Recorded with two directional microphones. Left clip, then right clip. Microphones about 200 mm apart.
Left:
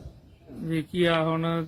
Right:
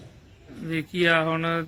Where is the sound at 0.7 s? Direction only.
20° left (ahead or behind).